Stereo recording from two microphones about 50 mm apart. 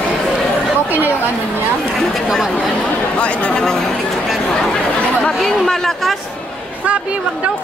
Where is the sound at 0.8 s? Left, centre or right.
Right.